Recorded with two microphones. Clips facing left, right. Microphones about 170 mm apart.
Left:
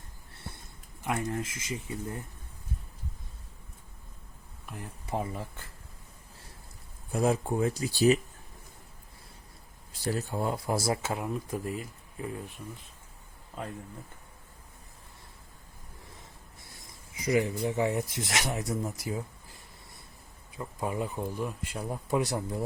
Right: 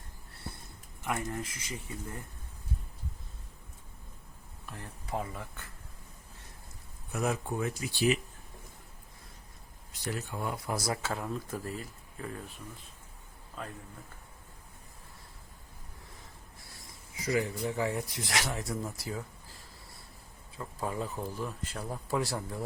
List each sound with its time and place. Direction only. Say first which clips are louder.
1.0 s speech: left 3 dB; 20° left (ahead or behind)
4.6 s a sound: left 3 dB; 10° left (ahead or behind)
5.0 s speech: left 3 dB; 25° left (ahead or behind)
7.1 s speech: left 5 dB; 30° left (ahead or behind)
9.9 s speech: left 5 dB; 35° left (ahead or behind); by 11.7 s 15° left (ahead or behind)
17.2 s speech: left 4 dB; 20° left (ahead or behind)